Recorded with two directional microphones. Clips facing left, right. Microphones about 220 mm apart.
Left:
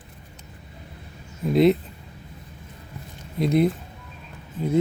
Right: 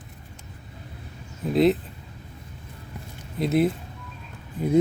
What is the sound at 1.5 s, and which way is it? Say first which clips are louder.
Speech: left 2 dB; centre (ahead or behind).